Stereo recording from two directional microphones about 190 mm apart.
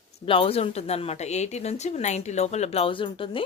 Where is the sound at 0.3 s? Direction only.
30° left (ahead or behind).